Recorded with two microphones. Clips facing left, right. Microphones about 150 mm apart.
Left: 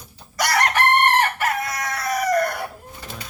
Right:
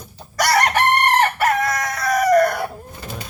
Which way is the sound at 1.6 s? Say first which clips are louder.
Right 6 dB; 45° right (ahead or behind).